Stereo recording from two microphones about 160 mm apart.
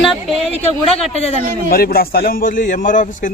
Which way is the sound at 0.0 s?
Centre (ahead or behind).